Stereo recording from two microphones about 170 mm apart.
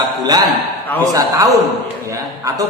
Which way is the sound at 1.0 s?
20° right (ahead or behind).